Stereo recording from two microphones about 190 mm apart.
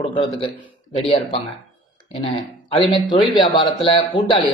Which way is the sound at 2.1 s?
30° left (ahead or behind).